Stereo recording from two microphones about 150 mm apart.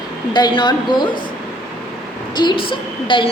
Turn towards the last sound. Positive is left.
turn(degrees=35)  # may be behind; listen again after turning